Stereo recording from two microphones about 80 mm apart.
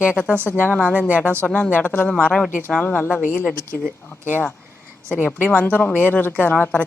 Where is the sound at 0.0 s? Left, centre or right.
Left.